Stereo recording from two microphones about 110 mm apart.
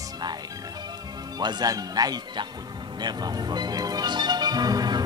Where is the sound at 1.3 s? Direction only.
40° right (ahead or behind).